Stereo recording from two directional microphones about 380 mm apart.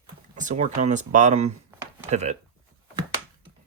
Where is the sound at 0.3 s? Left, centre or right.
Centre.